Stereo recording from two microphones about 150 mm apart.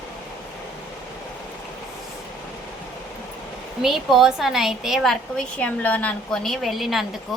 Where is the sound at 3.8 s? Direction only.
Centre (ahead or behind).